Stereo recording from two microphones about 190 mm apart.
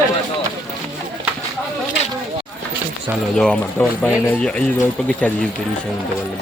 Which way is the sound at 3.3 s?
5° left (ahead or behind).